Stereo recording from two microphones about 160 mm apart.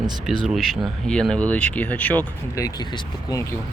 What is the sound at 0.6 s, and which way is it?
Speech, centre (ahead or behind).